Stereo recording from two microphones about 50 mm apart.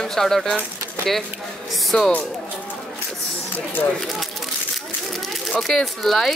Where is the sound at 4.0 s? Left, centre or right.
Centre.